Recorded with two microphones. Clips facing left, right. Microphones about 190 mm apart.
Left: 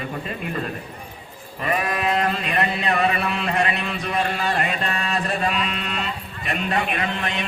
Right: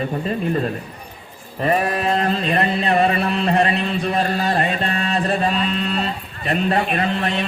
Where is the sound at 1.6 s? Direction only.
35° right (ahead or behind).